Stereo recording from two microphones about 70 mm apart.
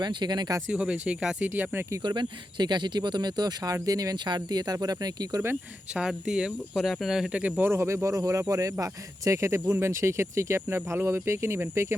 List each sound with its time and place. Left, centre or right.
0.0 s speech: right
0.7 s speech: centre
1.5 s speech: right
2.0 s speech: right
3.8 s speech: right
5.9 s speech: centre
7.3 s speech: centre
7.6 s speech: right